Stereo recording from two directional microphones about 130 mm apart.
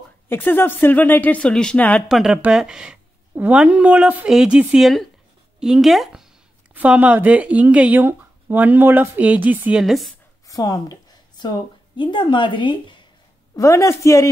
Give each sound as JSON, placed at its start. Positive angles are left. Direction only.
{"t": 0.3, "sound": "speech", "side_deg": 15}
{"t": 2.0, "sound": "speech", "side_deg": -5}
{"t": 10.4, "sound": "a woman's voice", "side_deg": 25}
{"t": 13.6, "sound": "a woman's voice", "side_deg": 25}